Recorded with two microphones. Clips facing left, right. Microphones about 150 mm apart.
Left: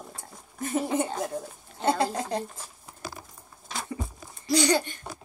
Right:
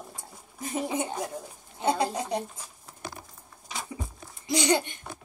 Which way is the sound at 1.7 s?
15° right (ahead or behind).